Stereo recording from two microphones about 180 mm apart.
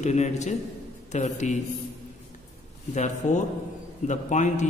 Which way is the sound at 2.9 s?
40° left (ahead or behind).